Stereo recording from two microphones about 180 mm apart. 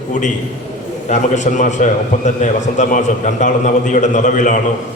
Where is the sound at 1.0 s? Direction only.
40° left (ahead or behind).